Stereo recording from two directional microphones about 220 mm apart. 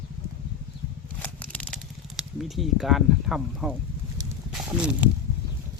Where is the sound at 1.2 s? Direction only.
5° left (ahead or behind).